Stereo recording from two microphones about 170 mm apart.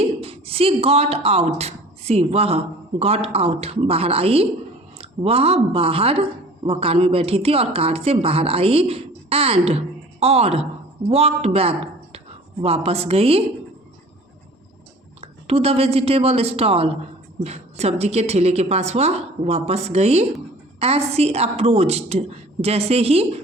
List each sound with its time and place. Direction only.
0.0 s speech: 35° right (ahead or behind)
15.2 s a woman's voice: 35° right (ahead or behind)